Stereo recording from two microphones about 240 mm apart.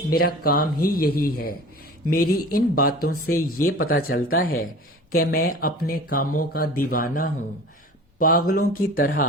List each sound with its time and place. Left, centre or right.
0.4 s speech: left